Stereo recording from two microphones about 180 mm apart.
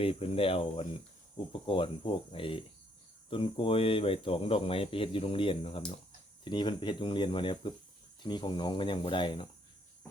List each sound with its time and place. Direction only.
0.0 s speech: 30° left (ahead or behind)